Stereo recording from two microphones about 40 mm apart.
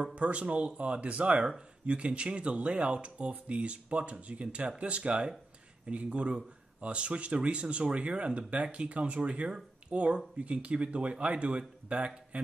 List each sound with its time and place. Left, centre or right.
0.0 s speech: right